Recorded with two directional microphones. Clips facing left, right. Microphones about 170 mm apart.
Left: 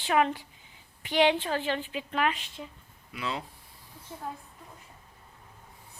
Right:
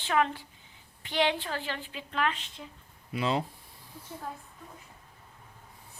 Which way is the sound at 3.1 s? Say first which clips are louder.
Right 6 dB; 25° right (ahead or behind).